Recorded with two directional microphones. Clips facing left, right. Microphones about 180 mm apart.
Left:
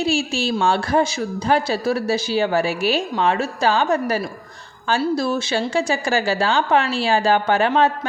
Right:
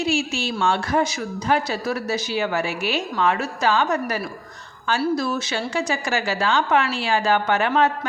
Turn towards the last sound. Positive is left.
turn(degrees=30)  # may be behind; listen again after turning